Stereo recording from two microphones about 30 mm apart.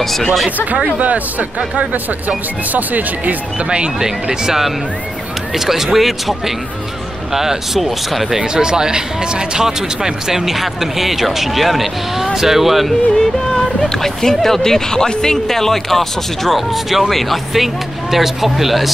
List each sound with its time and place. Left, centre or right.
0.0 s speech: centre
0.9 s speech: right
3.5 s speech: right
4.0 s speech: right
5.5 s speech: centre
8.4 s speech: right; by 12.9 s centre
13.2 s speech: centre
15.5 s speech: centre
16.5 s speech: centre
18.1 s speech: centre